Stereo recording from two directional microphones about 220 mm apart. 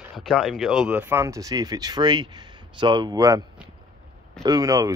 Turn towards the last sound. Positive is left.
turn(degrees=-15)  # may be behind; listen again after turning